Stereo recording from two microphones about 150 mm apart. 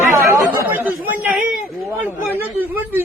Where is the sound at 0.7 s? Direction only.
10° right (ahead or behind).